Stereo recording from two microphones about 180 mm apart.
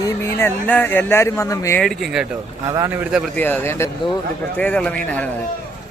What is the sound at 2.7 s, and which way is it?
Speech, 20° right (ahead or behind).